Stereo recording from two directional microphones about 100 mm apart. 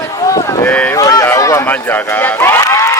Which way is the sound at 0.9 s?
35° left (ahead or behind).